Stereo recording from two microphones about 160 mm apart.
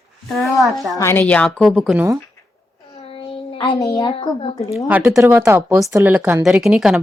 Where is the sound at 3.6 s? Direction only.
25° left (ahead or behind).